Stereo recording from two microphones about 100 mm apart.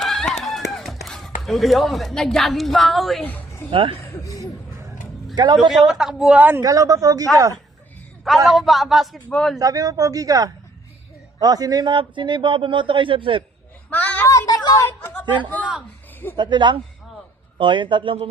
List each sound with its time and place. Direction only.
0.0 s run: 5° left (ahead or behind)
3.2 s speech: 20° left (ahead or behind)
3.7 s a man's voice: 60° right (ahead or behind)
4.0 s speech: 30° left (ahead or behind)
5.3 s speech: 45° right (ahead or behind)
5.5 s a man's voice: centre (ahead or behind)
6.6 s a woman's voice: 35° right (ahead or behind)
8.4 s a man's voice: centre (ahead or behind)
9.6 s a woman's voice: 35° right (ahead or behind); by 13.4 s 55° right (ahead or behind)
13.9 s a sound: 15° left (ahead or behind)
14.3 s a sound: 35° left (ahead or behind)
14.8 s chatter: 20° left (ahead or behind)
16.4 s a man's voice: 50° right (ahead or behind)